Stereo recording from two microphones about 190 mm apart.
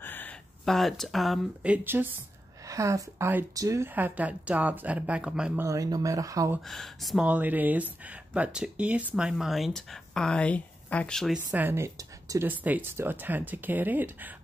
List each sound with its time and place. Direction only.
0.0 s speech: 10° left (ahead or behind)
5.7 s speech: 20° right (ahead or behind)
6.7 s speech: centre (ahead or behind)
11.5 s speech: 10° right (ahead or behind)